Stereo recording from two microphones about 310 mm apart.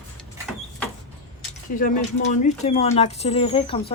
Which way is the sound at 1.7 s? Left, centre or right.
Left.